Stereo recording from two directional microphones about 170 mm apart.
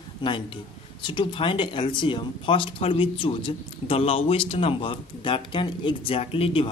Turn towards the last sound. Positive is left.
turn(degrees=35)  # may be behind; listen again after turning